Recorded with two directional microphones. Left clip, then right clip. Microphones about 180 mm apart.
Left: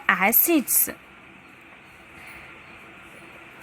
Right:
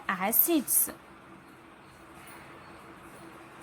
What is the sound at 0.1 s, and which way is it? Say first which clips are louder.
Speech: left 9 dB; 15° left (ahead or behind).